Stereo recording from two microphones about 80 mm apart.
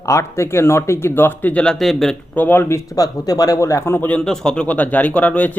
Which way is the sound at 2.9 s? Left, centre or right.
Left.